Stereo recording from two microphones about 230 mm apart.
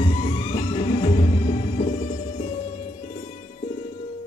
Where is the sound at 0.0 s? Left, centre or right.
Left.